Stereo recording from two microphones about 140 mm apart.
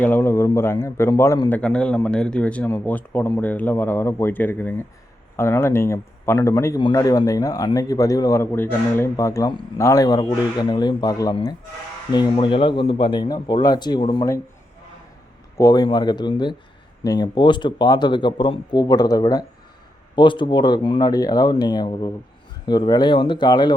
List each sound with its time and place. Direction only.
0.0 s a man's voice: 15° left (ahead or behind); by 14.3 s 35° left (ahead or behind)
15.5 s a man's voice: 25° left (ahead or behind)